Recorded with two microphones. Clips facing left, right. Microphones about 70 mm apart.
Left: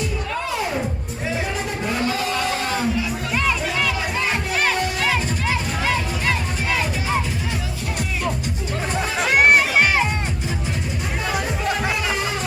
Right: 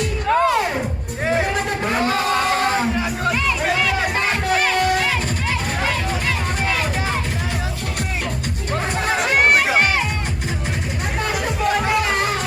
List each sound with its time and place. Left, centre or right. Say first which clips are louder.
0.0 s music: right 8 dB; right
1.3 s a sound: right 6 dB; right
4.9 s music: right 1 dB; centre
11.4 s music: right 3 dB; right